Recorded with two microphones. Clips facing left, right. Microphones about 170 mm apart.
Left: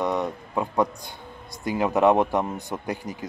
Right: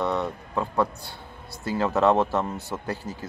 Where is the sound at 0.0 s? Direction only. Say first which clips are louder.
Left 1 dB; 15° left (ahead or behind).